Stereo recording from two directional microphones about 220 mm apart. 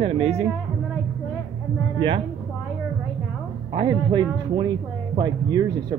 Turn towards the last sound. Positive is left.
turn(degrees=-20)  # may be behind; listen again after turning